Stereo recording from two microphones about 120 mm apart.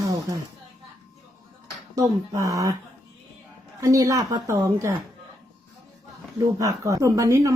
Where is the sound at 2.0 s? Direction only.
25° right (ahead or behind).